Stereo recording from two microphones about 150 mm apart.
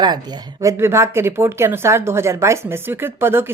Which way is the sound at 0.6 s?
20° right (ahead or behind).